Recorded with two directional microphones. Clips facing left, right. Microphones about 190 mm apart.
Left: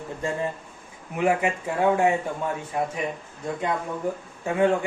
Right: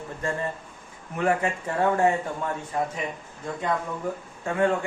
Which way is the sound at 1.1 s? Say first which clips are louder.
Left 2 dB; 10° left (ahead or behind).